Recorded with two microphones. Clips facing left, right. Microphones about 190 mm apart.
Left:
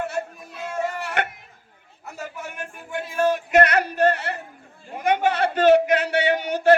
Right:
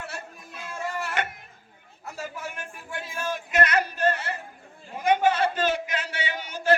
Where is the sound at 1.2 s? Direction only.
60° left (ahead or behind).